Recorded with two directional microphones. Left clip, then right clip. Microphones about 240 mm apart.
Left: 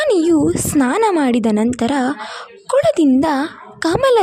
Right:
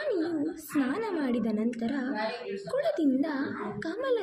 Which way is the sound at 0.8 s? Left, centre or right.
Left.